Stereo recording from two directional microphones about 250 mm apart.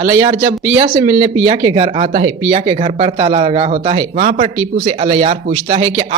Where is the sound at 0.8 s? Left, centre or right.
Centre.